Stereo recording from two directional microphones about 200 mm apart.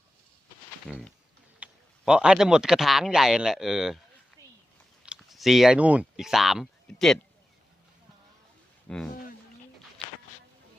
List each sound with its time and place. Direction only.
0.9 s speech: centre (ahead or behind)
5.0 s speech: centre (ahead or behind)
8.9 s speech: 5° left (ahead or behind)